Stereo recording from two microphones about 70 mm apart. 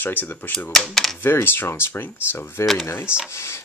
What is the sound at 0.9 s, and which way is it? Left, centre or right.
Speech, centre.